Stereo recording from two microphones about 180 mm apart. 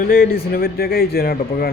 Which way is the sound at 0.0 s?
50° left (ahead or behind).